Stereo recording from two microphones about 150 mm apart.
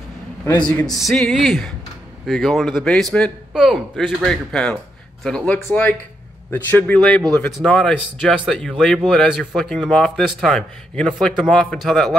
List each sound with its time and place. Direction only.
0.7 s a man's voice: 5° left (ahead or behind)